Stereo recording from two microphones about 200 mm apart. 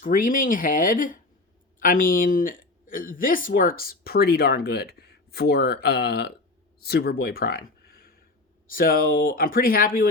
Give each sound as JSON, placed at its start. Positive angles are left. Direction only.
{"t": 0.0, "sound": "a woman's voice", "side_deg": 40}